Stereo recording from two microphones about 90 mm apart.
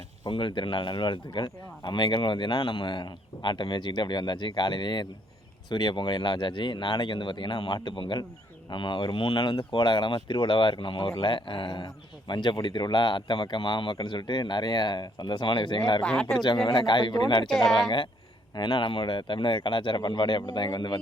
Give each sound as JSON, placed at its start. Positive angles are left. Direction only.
{"t": 0.3, "sound": "speech", "side_deg": 60}
{"t": 17.5, "sound": "speech", "side_deg": 0}
{"t": 17.8, "sound": "speech", "side_deg": 65}
{"t": 18.5, "sound": "speech", "side_deg": 50}